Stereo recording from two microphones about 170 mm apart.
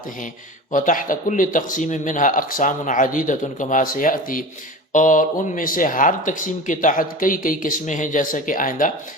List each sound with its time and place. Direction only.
0.7 s speech: 50° left (ahead or behind)